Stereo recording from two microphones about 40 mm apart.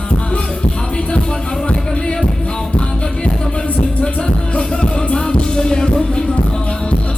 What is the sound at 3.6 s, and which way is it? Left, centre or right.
Music, left.